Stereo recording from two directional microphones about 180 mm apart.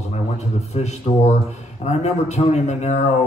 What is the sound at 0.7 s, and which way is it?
A man's voice, 35° left (ahead or behind).